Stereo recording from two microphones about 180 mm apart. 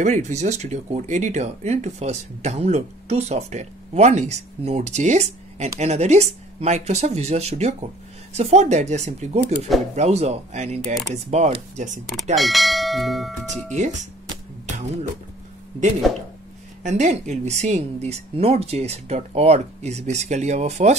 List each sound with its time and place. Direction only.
0.0 s speech: 40° right (ahead or behind)
12.4 s church bell: centre (ahead or behind)
16.8 s speech: 40° right (ahead or behind)